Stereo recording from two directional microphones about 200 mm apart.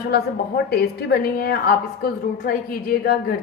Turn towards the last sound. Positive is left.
turn(degrees=50)  # may be behind; listen again after turning